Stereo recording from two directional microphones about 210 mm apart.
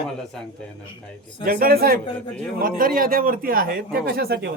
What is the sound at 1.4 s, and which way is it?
A man's voice, 45° right (ahead or behind).